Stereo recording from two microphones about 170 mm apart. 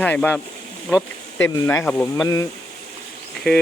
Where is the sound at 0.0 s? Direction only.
10° left (ahead or behind).